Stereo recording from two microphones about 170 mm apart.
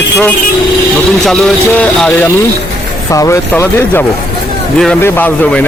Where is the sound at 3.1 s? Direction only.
20° left (ahead or behind).